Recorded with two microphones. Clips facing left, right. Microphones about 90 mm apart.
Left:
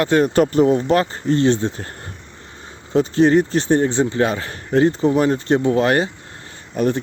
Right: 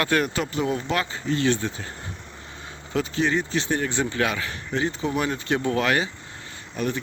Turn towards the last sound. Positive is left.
turn(degrees=45)  # may be behind; listen again after turning